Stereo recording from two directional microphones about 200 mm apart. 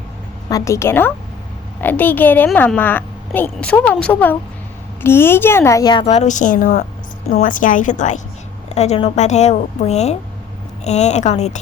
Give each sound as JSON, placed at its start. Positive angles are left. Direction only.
{"t": 0.5, "sound": "a woman's voice", "side_deg": 15}